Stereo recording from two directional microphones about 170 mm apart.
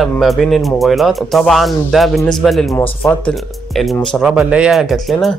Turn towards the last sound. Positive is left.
turn(degrees=0)  # may be behind; listen again after turning